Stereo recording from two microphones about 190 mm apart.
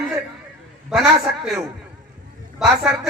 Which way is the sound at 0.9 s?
Centre (ahead or behind).